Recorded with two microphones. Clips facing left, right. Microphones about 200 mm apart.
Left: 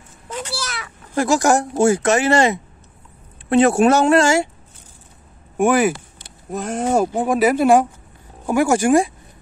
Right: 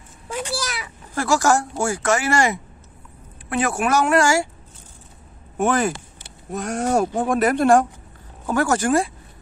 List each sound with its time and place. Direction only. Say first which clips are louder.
0.3 s a child's voice: right 1 dB; 10° right (ahead or behind)
1.1 s speech: left 3 dB; 20° left (ahead or behind)
5.6 s speech: left 4 dB; 10° left (ahead or behind)